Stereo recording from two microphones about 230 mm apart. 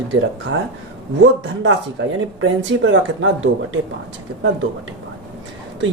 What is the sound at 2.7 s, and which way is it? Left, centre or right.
Speech, right.